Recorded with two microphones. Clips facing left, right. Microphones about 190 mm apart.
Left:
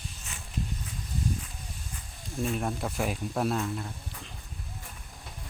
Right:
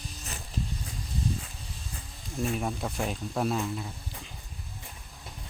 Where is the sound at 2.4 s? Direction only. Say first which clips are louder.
Even; centre (ahead or behind).